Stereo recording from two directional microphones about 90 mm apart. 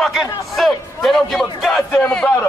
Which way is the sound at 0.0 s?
Centre (ahead or behind).